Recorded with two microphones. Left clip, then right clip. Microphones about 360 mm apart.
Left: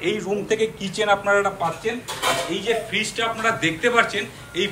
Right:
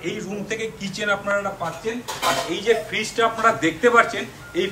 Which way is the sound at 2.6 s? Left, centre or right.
Centre.